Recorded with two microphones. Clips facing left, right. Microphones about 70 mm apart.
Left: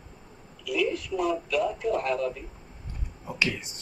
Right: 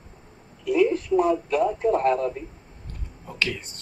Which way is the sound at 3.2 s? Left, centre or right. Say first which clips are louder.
Even; centre.